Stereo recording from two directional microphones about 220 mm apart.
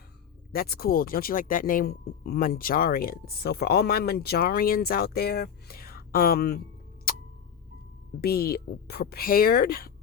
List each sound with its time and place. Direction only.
0.5 s speech: 45° left (ahead or behind)
7.1 s clock: 40° left (ahead or behind)
8.2 s speech: 45° left (ahead or behind)